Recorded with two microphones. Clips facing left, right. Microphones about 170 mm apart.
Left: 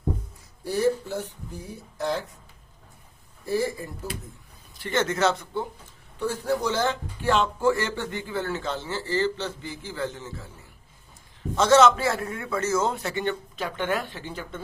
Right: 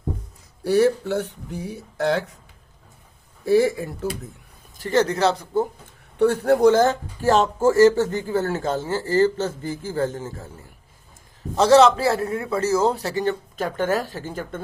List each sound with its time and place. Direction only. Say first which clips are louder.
0.6 s speech: right 6 dB; 75° right (ahead or behind)
3.4 s speech: right 9 dB; 75° right (ahead or behind)
4.8 s a man's voice: right 4 dB; 40° right (ahead or behind)
6.1 s speech: right 9 dB; 65° right (ahead or behind); by 10.7 s 45° right (ahead or behind)
11.5 s a man's voice: right 4 dB; 30° right (ahead or behind)